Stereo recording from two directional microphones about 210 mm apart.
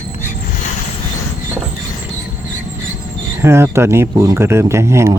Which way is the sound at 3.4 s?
10° right (ahead or behind).